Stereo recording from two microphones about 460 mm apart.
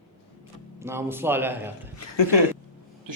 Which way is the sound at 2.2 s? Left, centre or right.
Left.